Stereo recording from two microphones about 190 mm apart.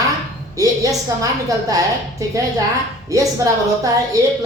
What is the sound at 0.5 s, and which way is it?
A woman's voice, 20° right (ahead or behind).